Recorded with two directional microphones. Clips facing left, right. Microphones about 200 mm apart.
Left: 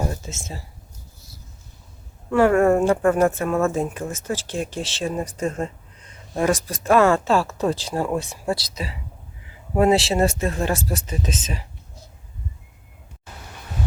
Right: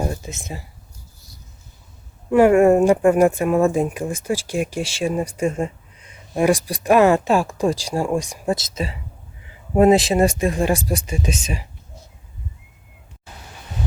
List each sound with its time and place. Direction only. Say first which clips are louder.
0.0 s speech: right 2 dB; 15° right (ahead or behind)
2.3 s speech: right 4 dB; 15° right (ahead or behind)